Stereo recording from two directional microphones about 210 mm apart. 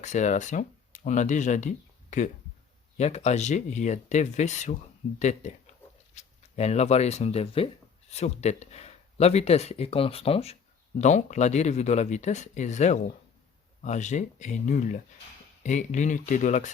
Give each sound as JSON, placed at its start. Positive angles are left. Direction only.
{"t": 0.0, "sound": "speech", "side_deg": 35}